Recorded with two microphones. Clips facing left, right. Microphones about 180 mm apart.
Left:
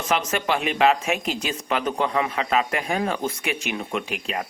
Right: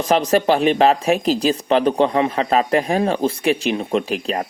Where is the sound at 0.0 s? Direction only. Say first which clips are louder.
Right 8 dB; 35° right (ahead or behind).